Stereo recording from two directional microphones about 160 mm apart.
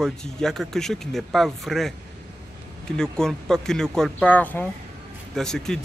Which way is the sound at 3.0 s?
5° left (ahead or behind).